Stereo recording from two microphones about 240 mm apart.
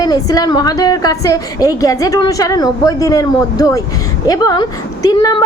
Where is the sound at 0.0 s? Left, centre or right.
Centre.